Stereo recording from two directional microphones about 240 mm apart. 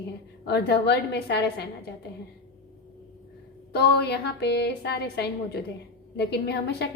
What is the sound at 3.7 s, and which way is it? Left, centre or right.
A woman's voice, left.